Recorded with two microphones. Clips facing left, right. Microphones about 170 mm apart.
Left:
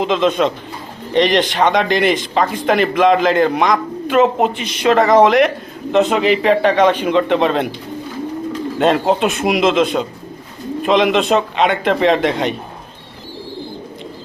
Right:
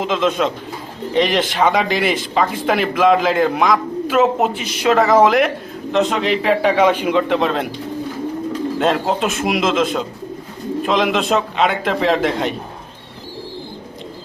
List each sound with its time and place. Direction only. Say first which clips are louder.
0.0 s speech: left 3 dB; centre (ahead or behind)
8.8 s speech: left 5 dB; centre (ahead or behind)